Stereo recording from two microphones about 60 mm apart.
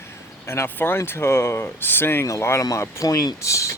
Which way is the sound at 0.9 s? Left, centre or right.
Left.